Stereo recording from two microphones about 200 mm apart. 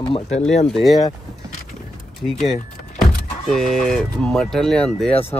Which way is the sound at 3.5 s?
Centre (ahead or behind).